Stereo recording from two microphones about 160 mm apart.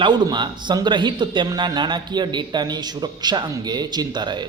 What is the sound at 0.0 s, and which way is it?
A man's voice, 30° right (ahead or behind).